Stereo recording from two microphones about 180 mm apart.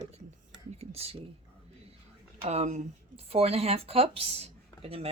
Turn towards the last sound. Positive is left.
turn(degrees=-35)  # may be behind; listen again after turning